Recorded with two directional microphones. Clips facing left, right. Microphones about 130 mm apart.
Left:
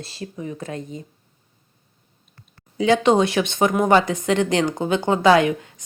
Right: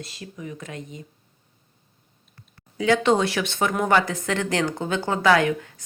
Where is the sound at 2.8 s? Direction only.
20° left (ahead or behind).